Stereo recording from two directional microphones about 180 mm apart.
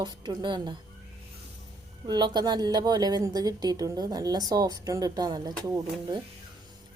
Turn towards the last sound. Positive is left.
turn(degrees=-20)  # may be behind; listen again after turning